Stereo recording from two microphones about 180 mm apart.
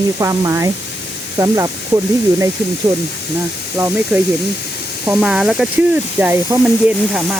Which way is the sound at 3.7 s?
15° right (ahead or behind).